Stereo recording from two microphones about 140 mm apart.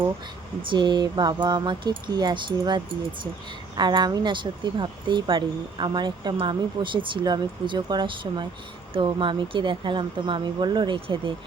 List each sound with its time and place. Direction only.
0.6 s speech: 35° right (ahead or behind)